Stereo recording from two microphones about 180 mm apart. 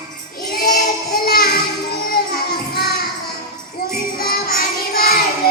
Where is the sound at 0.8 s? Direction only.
60° left (ahead or behind).